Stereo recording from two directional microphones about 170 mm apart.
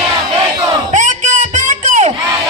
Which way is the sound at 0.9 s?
45° right (ahead or behind).